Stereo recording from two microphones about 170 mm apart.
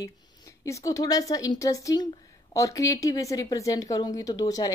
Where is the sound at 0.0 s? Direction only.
20° left (ahead or behind).